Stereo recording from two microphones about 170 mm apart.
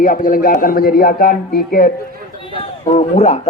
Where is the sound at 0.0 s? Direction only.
50° left (ahead or behind).